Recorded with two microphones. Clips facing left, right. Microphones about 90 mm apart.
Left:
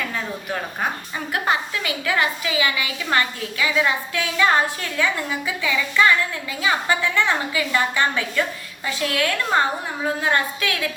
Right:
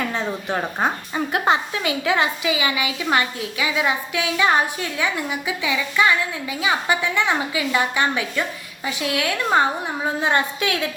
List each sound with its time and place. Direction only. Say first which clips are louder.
0.1 s a woman's voice: right 3 dB; 25° right (ahead or behind)